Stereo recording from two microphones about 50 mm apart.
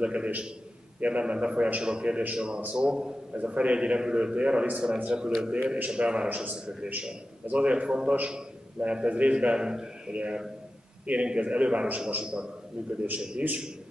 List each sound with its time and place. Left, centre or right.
0.0 s a man's voice: right
6.2 s a man's voice: right
6.6 s a man's voice: centre
8.3 s a sound: centre
8.8 s a man's voice: right